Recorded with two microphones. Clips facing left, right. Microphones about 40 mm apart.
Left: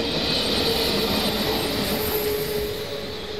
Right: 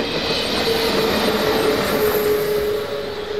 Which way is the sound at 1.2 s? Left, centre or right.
Right.